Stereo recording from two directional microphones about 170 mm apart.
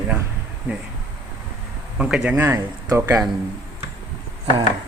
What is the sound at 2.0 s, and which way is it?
Speech, 5° right (ahead or behind).